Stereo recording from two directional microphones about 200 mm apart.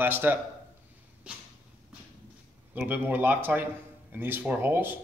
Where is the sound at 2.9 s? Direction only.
10° right (ahead or behind).